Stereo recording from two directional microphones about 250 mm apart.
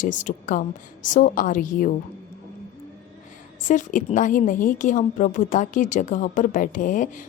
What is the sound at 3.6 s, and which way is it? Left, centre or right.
Speech, left.